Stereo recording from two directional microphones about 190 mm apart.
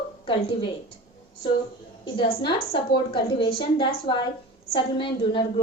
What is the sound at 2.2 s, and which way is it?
A child's voice, 25° left (ahead or behind).